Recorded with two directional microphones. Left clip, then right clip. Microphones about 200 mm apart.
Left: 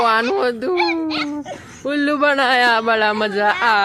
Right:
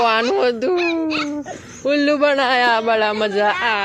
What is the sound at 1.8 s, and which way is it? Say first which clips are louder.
A man's voice: right 1 dB; 10° left (ahead or behind).